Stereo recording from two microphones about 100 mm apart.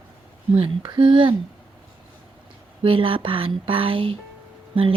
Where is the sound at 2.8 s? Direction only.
60° right (ahead or behind).